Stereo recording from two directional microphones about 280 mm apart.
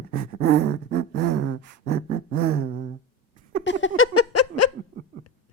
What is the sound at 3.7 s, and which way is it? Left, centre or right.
Giggle, left.